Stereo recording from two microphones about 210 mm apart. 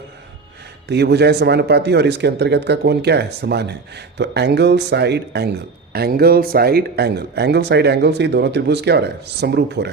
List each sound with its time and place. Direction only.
0.9 s speech: 50° right (ahead or behind)